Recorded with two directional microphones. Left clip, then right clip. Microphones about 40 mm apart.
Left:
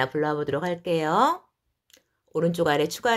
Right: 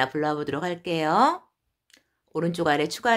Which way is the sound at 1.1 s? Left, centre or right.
Centre.